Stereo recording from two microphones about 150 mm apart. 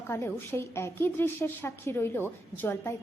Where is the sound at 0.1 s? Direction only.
15° left (ahead or behind).